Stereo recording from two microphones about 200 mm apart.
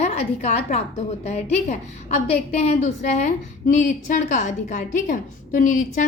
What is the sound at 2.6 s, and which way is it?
A woman's voice, 35° left (ahead or behind).